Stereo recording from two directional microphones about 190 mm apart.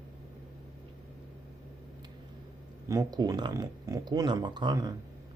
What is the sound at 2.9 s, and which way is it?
Speech, 20° right (ahead or behind).